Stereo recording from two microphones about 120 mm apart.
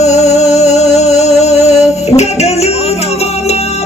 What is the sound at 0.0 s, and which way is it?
Music, 70° left (ahead or behind).